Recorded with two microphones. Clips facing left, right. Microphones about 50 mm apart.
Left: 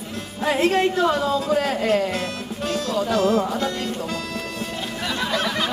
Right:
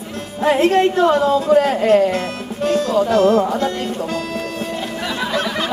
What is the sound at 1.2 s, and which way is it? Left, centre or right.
Speech, centre.